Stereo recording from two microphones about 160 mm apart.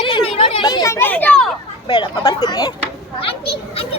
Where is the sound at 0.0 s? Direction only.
35° left (ahead or behind); by 1.5 s 5° left (ahead or behind).